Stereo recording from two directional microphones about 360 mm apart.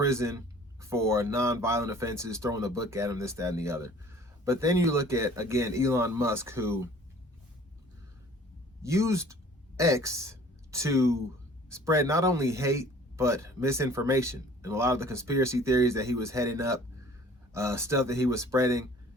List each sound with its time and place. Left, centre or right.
0.0 s speech: centre
8.8 s speech: centre